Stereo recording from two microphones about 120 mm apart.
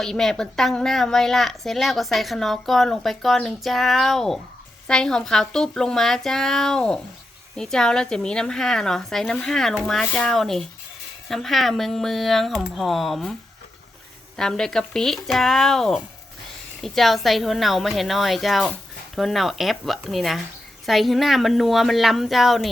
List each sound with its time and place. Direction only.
0.0 s a woman's voice: 5° left (ahead or behind)
14.3 s a woman's voice: 5° left (ahead or behind)